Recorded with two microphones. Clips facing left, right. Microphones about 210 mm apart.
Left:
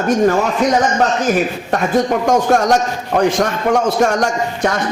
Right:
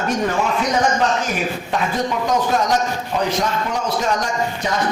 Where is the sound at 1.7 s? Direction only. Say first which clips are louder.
Left 7 dB; 50° left (ahead or behind).